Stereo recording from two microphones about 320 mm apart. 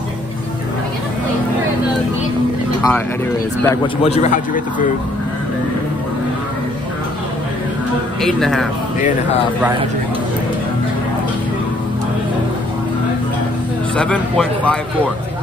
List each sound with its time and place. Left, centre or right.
3.6 s a man's voice: centre
8.2 s a man's voice: centre
13.9 s a man's voice: centre